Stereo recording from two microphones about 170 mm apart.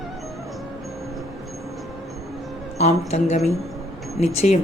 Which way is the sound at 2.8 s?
40° left (ahead or behind).